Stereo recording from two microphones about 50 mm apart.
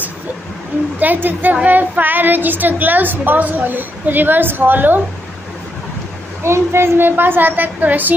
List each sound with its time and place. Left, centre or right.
0.9 s speech: right
6.4 s a woman's voice: right